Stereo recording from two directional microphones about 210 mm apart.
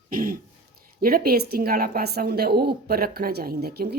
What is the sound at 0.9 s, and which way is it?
A woman's voice, 45° right (ahead or behind).